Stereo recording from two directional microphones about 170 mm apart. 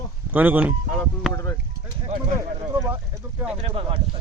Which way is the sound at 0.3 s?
10° right (ahead or behind).